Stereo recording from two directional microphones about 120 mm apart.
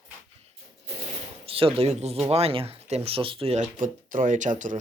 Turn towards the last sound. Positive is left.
turn(degrees=-90)